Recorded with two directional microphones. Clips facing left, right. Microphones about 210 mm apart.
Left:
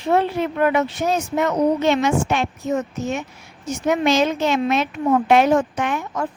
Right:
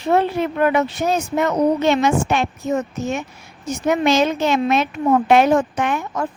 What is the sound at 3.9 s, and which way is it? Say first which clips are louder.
Speech: right 1 dB; 50° right (ahead or behind).